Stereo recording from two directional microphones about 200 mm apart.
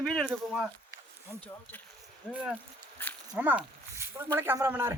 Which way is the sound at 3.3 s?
10° right (ahead or behind).